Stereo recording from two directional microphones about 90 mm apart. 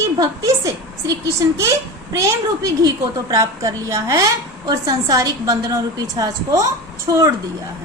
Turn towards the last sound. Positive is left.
turn(degrees=-40)  # may be behind; listen again after turning